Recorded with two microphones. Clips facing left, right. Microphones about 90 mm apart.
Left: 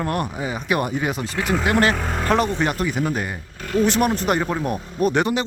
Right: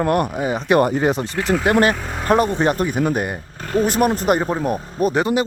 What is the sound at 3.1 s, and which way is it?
Speech, 45° right (ahead or behind).